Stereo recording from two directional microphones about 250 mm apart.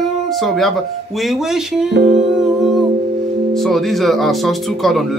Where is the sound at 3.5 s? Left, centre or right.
Centre.